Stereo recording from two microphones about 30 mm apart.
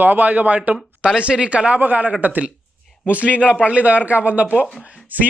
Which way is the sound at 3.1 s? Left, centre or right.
Right.